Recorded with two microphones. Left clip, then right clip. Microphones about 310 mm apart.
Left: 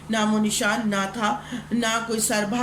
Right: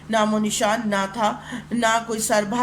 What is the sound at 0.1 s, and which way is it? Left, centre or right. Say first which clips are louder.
Speech: right 3 dB; centre.